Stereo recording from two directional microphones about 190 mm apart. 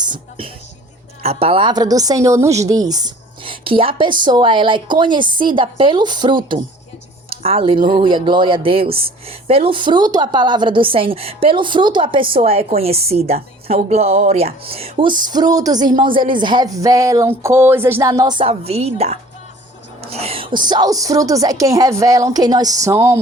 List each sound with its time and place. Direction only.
0.0 s music: 25° right (ahead or behind)
1.2 s speech: 30° right (ahead or behind); by 23.2 s 15° right (ahead or behind)